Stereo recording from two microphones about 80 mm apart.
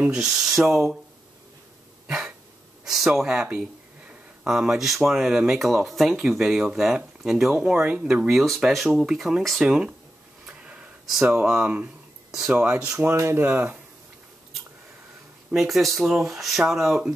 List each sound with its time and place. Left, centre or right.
0.1 s speech: centre
2.0 s cough: centre
2.8 s gasp: centre
4.5 s speech: centre
9.7 s speech: centre
10.4 s a sound: centre
11.4 s speech: centre
13.2 s speech: right
15.5 s speech: centre